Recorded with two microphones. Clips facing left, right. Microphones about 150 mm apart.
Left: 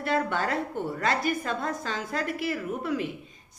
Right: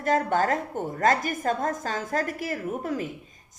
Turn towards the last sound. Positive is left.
turn(degrees=-45)  # may be behind; listen again after turning